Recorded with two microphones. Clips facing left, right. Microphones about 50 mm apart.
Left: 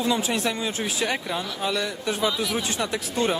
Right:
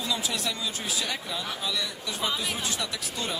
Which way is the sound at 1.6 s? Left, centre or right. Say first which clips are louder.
Left 6 dB; left.